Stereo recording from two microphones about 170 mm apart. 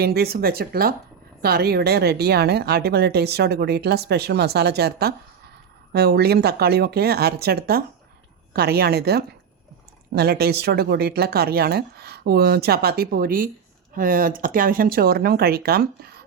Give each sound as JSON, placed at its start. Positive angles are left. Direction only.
{"t": 0.0, "sound": "speech", "side_deg": -65}